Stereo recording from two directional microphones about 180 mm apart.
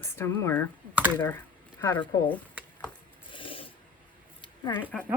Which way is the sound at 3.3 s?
30° left (ahead or behind).